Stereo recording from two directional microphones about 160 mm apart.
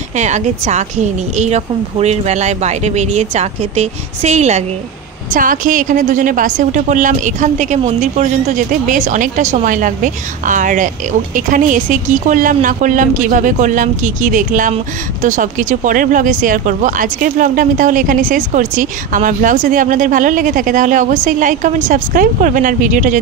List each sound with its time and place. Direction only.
0.2 s a woman's voice: 45° right (ahead or behind)
5.3 s a woman's voice: 55° right (ahead or behind)